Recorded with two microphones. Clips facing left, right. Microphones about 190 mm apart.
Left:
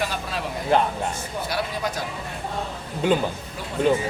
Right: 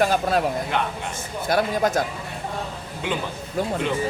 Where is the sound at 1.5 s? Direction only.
45° right (ahead or behind).